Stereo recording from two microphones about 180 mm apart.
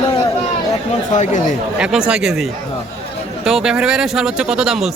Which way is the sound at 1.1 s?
45° left (ahead or behind).